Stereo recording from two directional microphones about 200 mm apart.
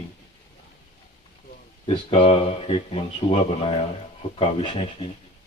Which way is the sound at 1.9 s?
25° left (ahead or behind).